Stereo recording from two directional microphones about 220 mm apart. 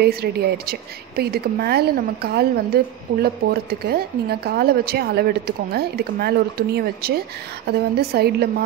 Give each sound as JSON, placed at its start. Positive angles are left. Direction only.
{"t": 0.0, "sound": "a woman's voice", "side_deg": -45}